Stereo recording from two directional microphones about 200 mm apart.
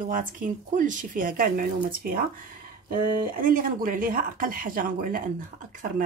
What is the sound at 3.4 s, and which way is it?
Speech, 45° right (ahead or behind).